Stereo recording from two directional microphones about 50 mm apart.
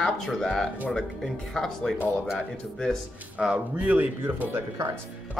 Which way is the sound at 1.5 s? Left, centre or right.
Centre.